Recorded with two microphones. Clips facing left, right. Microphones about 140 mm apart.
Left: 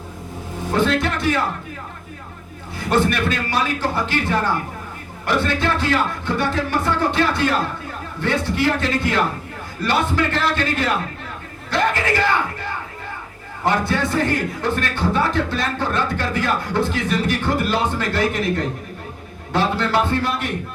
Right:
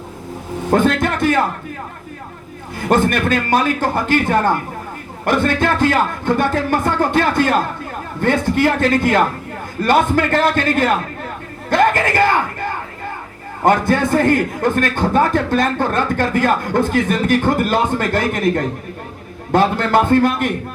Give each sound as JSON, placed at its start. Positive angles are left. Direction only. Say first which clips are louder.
{"t": 0.7, "sound": "a man's voice", "louder": "right 4 dB", "side_deg": -50}
{"t": 2.9, "sound": "a man's voice", "louder": "right 4 dB", "side_deg": -50}